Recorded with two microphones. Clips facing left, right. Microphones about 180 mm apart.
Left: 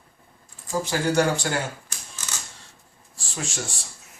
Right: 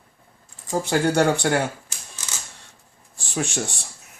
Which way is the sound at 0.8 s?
60° right (ahead or behind).